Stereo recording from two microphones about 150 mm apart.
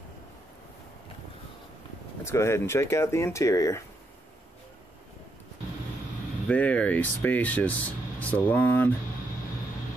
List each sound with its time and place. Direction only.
2.2 s speech: 20° left (ahead or behind)
6.4 s speech: 10° left (ahead or behind)